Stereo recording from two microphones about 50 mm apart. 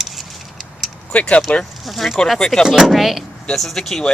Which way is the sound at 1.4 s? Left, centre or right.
Centre.